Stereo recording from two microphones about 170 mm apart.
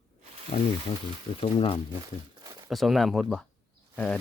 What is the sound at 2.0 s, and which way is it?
Crumpling, 20° right (ahead or behind).